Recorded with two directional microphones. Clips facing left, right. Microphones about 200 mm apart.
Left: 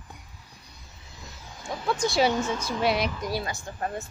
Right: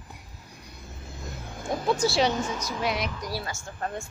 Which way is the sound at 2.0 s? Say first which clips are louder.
Left 3 dB; centre (ahead or behind).